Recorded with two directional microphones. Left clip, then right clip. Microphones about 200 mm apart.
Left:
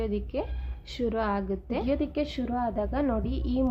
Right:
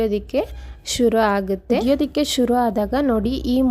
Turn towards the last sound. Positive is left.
turn(degrees=-40)  # may be behind; listen again after turning